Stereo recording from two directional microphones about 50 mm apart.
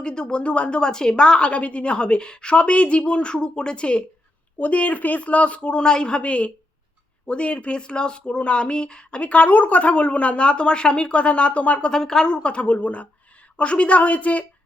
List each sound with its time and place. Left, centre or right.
0.0 s speech: centre
11.9 s speech: centre; by 14.4 s left